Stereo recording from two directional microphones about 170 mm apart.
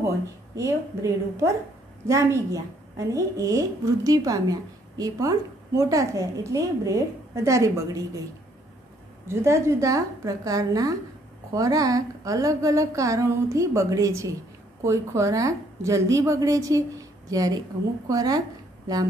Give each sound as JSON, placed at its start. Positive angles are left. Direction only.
{"t": 0.6, "sound": "a woman's voice", "side_deg": -20}
{"t": 9.3, "sound": "a woman's voice", "side_deg": -15}